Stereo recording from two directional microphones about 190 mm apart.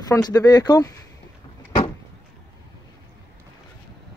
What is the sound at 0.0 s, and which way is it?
Speech, 20° left (ahead or behind).